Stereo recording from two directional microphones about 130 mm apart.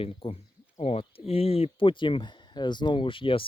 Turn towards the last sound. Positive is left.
turn(degrees=40)  # may be behind; listen again after turning